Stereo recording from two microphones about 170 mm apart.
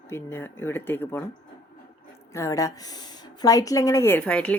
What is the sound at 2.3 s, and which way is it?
A woman's voice, 20° left (ahead or behind).